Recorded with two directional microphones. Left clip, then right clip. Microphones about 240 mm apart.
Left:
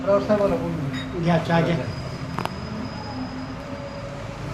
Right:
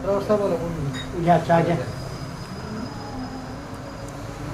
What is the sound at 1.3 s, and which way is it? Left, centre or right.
Speech, centre.